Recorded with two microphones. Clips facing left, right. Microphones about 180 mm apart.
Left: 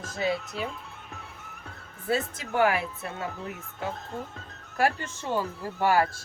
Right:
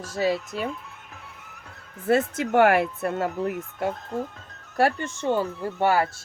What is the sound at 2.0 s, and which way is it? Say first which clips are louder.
Speech: right 7 dB; 60° right (ahead or behind).